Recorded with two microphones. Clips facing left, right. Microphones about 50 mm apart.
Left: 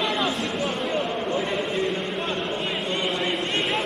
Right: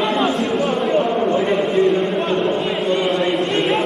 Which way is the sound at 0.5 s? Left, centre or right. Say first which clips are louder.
Right 8 dB; centre.